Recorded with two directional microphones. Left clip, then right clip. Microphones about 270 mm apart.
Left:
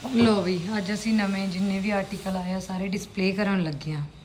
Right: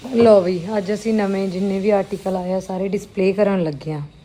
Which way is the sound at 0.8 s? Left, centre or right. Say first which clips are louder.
Right 8 dB; left.